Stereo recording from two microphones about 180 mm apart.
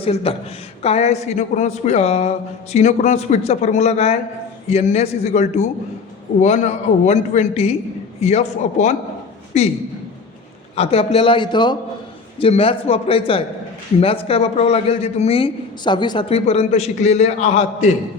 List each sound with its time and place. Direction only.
0.0 s a man's voice: 30° left (ahead or behind)
10.8 s a man's voice: 35° left (ahead or behind)